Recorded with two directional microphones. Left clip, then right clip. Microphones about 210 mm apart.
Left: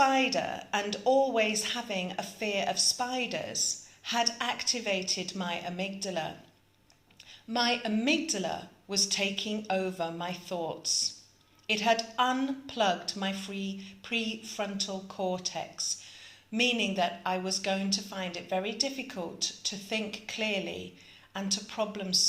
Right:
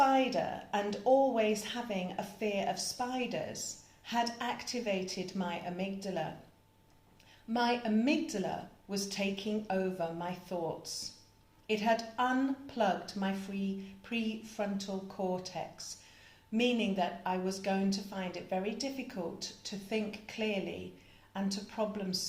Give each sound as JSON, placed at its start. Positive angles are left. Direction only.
{"t": 0.0, "sound": "a woman's voice", "side_deg": 15}
{"t": 7.5, "sound": "a woman's voice", "side_deg": 15}